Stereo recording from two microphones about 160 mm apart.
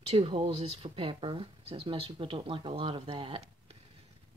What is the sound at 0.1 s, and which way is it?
Speech, 35° right (ahead or behind).